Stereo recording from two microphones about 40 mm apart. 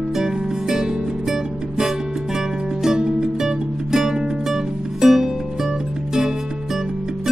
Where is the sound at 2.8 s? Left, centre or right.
Centre.